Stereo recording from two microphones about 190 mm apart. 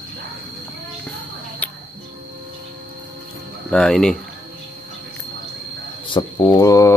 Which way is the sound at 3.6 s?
5° left (ahead or behind).